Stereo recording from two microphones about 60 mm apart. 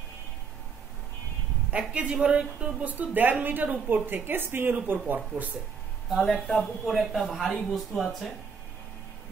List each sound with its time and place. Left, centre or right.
1.7 s a man's voice: right
6.0 s speech: centre